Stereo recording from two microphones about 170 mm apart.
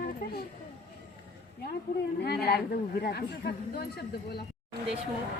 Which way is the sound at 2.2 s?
70° left (ahead or behind).